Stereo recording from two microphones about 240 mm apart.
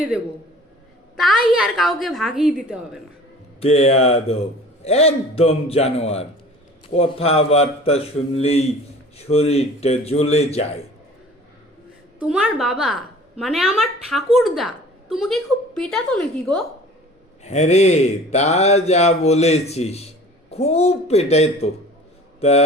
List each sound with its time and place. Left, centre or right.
1.1 s a woman's voice: centre
3.6 s speech: left
12.2 s a woman's voice: centre
17.4 s speech: left